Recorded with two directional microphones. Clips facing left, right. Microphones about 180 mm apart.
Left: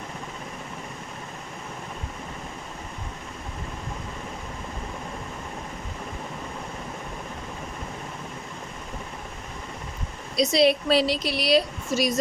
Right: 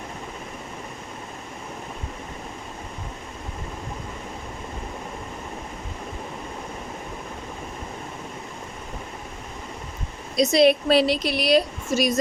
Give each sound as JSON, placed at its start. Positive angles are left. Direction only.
{"t": 10.3, "sound": "a woman's voice", "side_deg": -50}